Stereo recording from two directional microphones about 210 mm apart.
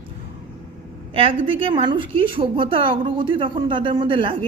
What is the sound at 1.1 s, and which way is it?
A woman's voice, 25° right (ahead or behind).